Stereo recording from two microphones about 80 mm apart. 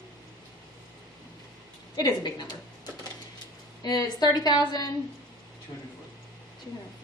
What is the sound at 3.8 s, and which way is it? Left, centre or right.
A woman's voice, left.